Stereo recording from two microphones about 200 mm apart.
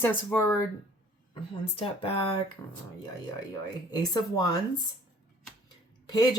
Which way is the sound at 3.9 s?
20° left (ahead or behind).